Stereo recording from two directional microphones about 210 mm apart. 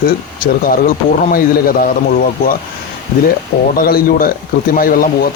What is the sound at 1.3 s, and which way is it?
Speech, 45° left (ahead or behind).